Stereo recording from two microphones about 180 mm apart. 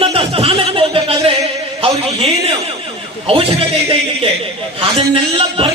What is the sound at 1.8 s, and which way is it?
A man's voice, 35° right (ahead or behind).